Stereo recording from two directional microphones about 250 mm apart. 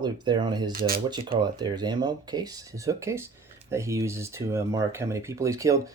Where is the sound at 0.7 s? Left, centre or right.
Right.